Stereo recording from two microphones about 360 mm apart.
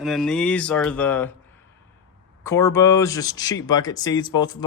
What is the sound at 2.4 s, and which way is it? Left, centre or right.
Speech, centre.